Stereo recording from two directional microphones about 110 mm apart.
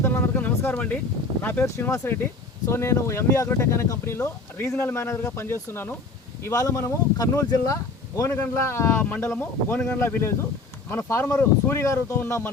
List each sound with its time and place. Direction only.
0.0 s vehicle: 20° left (ahead or behind)
1.4 s speech: 15° left (ahead or behind)
1.6 s speech: 25° left (ahead or behind)